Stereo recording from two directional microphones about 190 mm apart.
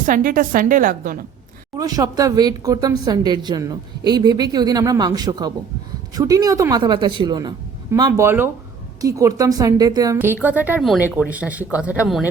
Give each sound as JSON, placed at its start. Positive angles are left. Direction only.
{"t": 0.0, "sound": "a woman's voice", "side_deg": -45}
{"t": 1.8, "sound": "a woman's voice", "side_deg": -20}